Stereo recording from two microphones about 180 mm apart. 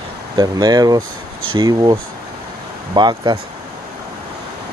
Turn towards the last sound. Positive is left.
turn(degrees=-25)  # may be behind; listen again after turning